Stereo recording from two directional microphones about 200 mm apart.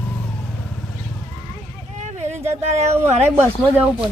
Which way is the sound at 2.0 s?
35° right (ahead or behind).